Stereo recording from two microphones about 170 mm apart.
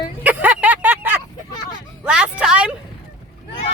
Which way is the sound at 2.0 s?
5° right (ahead or behind).